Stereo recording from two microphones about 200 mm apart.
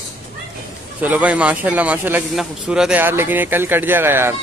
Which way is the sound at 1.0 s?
5° right (ahead or behind).